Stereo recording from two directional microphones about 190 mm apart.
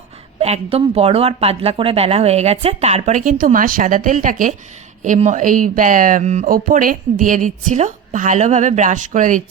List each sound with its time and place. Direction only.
0.3 s a woman's voice: 35° right (ahead or behind)